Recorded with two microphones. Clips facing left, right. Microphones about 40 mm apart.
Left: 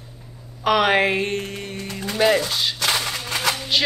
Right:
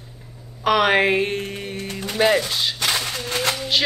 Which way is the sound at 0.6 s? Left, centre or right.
Centre.